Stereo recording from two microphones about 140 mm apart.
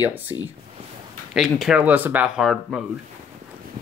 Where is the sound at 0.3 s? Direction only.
30° right (ahead or behind).